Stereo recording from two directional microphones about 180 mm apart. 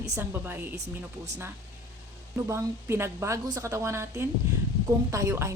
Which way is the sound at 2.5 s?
15° right (ahead or behind).